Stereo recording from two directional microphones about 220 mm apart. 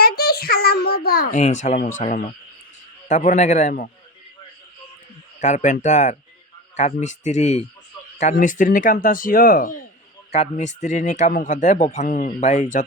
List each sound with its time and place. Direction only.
0.0 s a sound: 45° left (ahead or behind)
1.4 s speech: 30° left (ahead or behind)
5.4 s speech: 35° left (ahead or behind)